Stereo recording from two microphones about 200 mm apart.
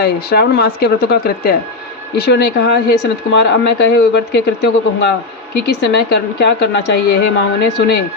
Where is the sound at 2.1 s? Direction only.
55° left (ahead or behind).